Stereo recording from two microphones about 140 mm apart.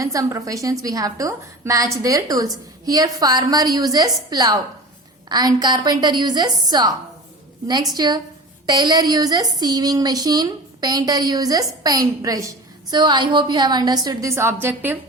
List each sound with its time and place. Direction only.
0.0 s a woman's voice: 25° right (ahead or behind)
7.9 s a woman's voice: 30° right (ahead or behind); by 14.9 s 15° right (ahead or behind)